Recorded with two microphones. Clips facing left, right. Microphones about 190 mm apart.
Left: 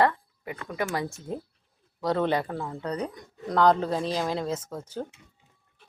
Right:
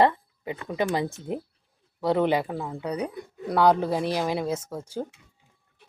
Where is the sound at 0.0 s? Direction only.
20° right (ahead or behind).